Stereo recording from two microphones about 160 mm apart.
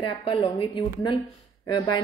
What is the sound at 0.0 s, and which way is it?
A woman's voice, 30° left (ahead or behind).